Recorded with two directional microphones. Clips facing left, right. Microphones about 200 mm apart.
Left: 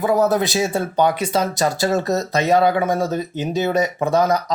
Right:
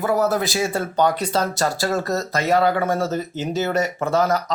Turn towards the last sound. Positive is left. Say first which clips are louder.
# left 2 dB
turn(degrees=15)  # may be behind; listen again after turning